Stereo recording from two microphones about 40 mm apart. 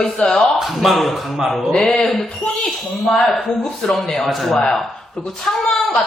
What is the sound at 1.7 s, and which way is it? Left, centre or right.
Speech, centre.